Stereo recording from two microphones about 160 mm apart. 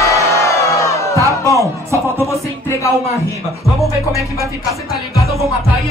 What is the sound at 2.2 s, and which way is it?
Music, 20° left (ahead or behind).